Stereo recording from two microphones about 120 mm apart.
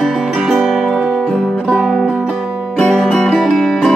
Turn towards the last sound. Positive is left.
turn(degrees=5)  # may be behind; listen again after turning